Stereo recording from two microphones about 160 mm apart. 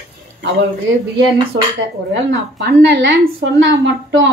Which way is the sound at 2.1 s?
90° right.